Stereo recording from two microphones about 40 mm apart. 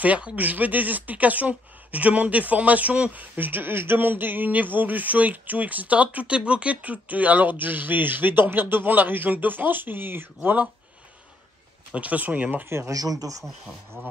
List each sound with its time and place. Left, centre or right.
0.0 s speech: right
11.9 s speech: right
12.6 s speech: right